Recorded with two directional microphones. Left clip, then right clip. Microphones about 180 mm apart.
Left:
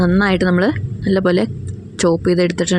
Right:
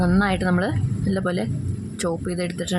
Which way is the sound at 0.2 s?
25° left (ahead or behind).